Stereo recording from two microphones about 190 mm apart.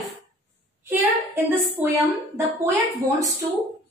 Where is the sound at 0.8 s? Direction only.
10° right (ahead or behind).